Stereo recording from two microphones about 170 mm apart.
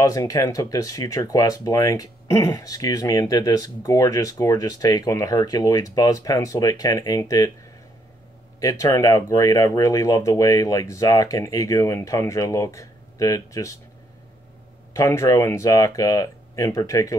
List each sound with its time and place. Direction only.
0.0 s speech: 20° left (ahead or behind)
8.5 s speech: 20° left (ahead or behind)
15.0 s speech: 20° left (ahead or behind)